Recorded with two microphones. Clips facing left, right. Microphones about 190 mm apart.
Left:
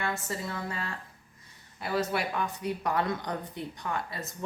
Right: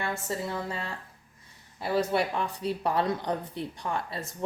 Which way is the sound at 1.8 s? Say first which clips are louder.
Right 3 dB; 30° right (ahead or behind).